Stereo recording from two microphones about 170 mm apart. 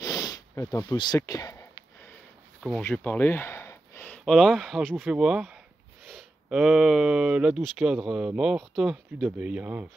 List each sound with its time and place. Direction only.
0.0 s snort: 20° left (ahead or behind)
2.9 s speech: 10° left (ahead or behind); by 9.8 s 10° right (ahead or behind)